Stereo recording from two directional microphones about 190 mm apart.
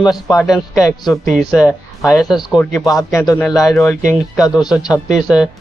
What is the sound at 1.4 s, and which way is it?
Speech, centre (ahead or behind).